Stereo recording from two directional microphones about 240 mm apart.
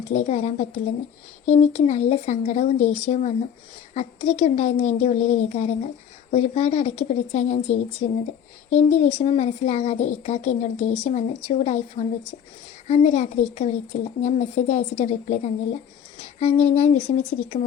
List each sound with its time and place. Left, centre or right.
0.1 s speech: left